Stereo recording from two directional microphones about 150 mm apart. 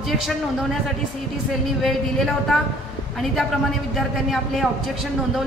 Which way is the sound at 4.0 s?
Centre (ahead or behind).